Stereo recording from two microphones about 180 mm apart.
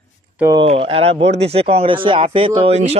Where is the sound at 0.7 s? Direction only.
30° right (ahead or behind).